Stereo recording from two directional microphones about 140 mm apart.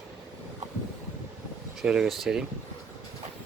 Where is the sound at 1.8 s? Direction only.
5° right (ahead or behind).